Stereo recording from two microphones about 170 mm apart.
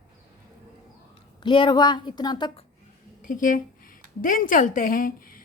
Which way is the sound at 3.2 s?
50° left (ahead or behind).